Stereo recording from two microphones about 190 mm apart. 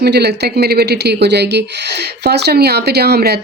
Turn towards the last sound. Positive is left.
turn(degrees=-55)  # may be behind; listen again after turning